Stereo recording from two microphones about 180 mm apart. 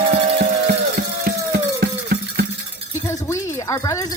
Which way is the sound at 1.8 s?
55° right (ahead or behind).